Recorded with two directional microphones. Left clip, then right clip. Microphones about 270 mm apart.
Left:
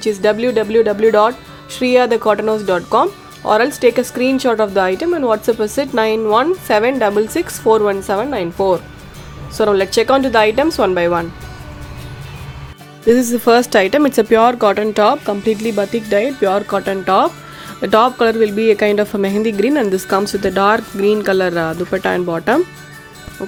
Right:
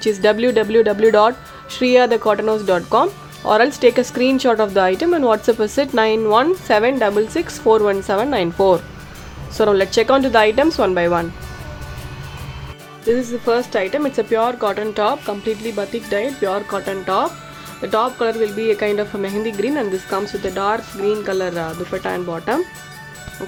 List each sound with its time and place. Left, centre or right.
0.0 s speech: centre
13.1 s speech: left